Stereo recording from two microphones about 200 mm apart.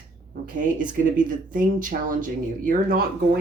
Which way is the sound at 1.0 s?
40° right (ahead or behind).